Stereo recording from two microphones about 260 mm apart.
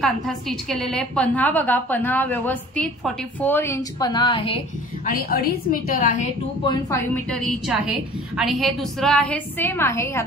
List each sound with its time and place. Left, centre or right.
0.0 s a woman's voice: centre
5.0 s a woman's voice: left
7.2 s a woman's voice: centre